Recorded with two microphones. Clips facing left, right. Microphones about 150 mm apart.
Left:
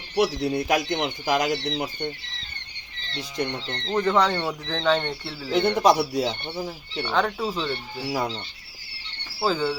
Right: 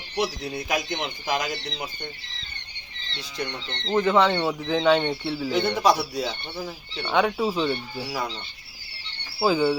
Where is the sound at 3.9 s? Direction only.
5° right (ahead or behind).